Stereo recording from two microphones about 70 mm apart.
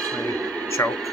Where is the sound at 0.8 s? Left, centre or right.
Left.